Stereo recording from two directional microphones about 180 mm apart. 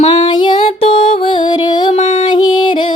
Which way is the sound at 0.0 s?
40° left (ahead or behind).